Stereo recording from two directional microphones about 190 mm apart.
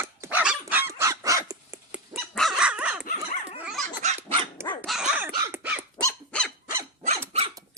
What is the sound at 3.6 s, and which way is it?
Dog, centre (ahead or behind).